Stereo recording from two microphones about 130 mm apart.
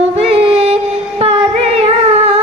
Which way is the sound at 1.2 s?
50° right (ahead or behind).